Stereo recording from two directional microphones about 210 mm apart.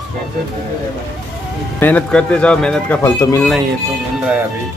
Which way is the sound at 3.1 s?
15° left (ahead or behind).